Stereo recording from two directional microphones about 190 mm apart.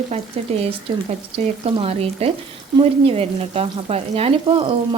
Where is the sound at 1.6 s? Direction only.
30° right (ahead or behind).